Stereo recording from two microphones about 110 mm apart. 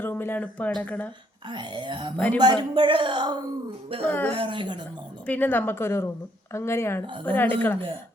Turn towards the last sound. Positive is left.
turn(degrees=15)  # may be behind; listen again after turning